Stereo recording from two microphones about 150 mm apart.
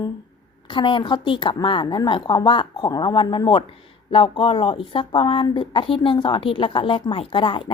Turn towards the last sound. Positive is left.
turn(degrees=35)  # may be behind; listen again after turning